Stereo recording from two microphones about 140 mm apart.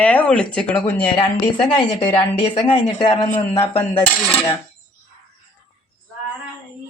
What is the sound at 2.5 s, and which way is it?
Speech, 40° left (ahead or behind).